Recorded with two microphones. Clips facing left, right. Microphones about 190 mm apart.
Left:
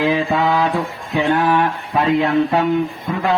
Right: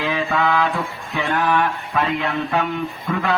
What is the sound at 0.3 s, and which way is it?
Mantra, 20° left (ahead or behind).